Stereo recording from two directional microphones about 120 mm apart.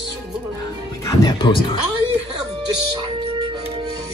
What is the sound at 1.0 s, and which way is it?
Speech, 30° left (ahead or behind).